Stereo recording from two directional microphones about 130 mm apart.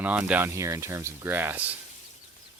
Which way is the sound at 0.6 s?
25° right (ahead or behind).